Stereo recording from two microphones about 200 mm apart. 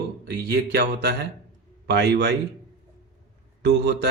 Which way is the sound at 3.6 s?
55° right (ahead or behind).